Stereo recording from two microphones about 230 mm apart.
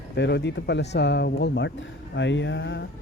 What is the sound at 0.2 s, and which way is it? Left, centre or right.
A man's voice, left.